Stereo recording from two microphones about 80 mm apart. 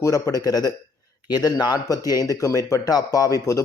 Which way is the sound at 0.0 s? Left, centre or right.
Left.